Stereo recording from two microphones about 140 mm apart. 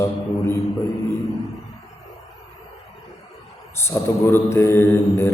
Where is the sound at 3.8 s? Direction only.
15° left (ahead or behind).